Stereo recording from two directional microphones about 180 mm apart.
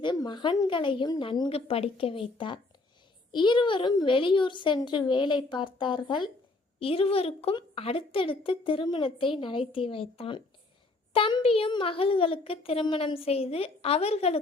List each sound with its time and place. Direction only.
0.0 s a woman's voice: 25° left (ahead or behind)